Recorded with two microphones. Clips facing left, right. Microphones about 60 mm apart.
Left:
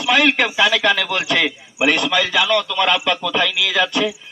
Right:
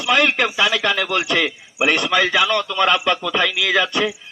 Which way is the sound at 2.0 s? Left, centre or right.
Right.